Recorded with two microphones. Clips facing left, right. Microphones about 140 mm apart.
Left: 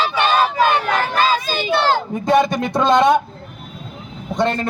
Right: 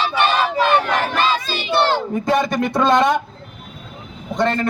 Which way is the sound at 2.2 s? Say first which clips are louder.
Left 4 dB; 20° left (ahead or behind).